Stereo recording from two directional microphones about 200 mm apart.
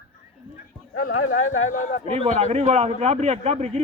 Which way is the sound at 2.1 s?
35° right (ahead or behind).